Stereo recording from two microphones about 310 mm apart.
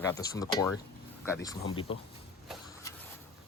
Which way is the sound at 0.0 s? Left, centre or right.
Centre.